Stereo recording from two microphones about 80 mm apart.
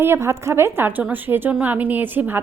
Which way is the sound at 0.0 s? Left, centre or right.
Right.